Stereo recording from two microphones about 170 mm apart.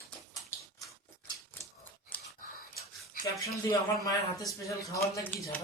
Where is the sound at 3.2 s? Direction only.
20° left (ahead or behind).